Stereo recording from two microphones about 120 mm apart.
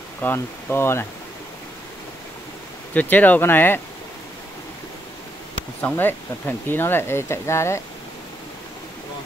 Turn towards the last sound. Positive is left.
turn(degrees=25)  # may be behind; listen again after turning